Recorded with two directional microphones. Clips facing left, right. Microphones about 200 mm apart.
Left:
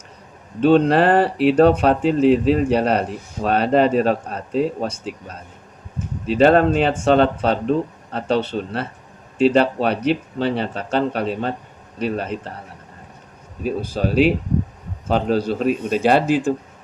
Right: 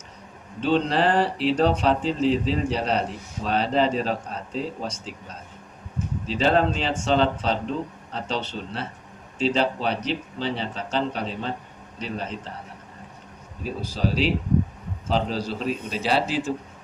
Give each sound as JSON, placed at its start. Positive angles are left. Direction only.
{"t": 0.6, "sound": "speech", "side_deg": 60}
{"t": 6.2, "sound": "speech", "side_deg": 60}
{"t": 13.7, "sound": "a man's voice", "side_deg": 55}